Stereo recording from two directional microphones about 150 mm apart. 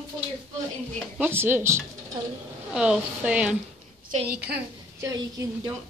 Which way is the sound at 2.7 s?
5° right (ahead or behind).